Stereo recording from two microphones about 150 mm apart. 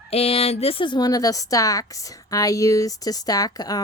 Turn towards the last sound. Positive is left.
turn(degrees=25)  # may be behind; listen again after turning